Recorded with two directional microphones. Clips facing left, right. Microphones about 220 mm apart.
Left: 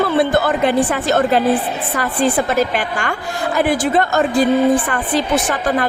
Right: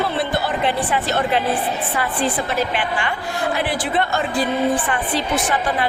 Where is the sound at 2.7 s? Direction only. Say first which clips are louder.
Left 2 dB; 45° left (ahead or behind).